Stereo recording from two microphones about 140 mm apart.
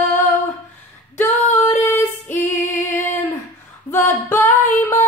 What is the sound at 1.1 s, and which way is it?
Female singing, 15° left (ahead or behind).